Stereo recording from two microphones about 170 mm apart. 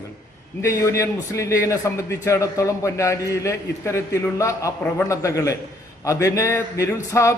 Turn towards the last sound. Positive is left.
turn(degrees=20)  # may be behind; listen again after turning